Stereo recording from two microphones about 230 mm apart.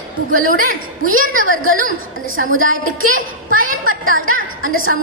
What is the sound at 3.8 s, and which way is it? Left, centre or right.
Music, right.